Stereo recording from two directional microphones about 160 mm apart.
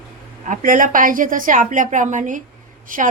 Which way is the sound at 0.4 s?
55° right (ahead or behind).